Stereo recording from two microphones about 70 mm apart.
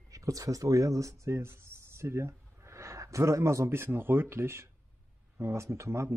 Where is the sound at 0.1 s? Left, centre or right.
Right.